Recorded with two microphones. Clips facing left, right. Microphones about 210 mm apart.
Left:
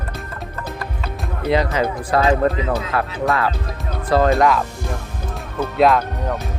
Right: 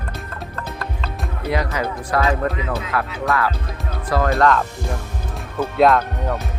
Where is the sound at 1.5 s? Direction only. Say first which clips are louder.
Left 4 dB; 25° left (ahead or behind).